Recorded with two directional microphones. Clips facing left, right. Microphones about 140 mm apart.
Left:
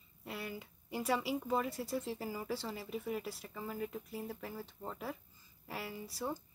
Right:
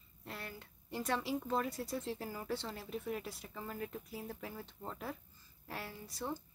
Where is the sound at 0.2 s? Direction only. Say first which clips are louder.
Left 4 dB; 5° left (ahead or behind).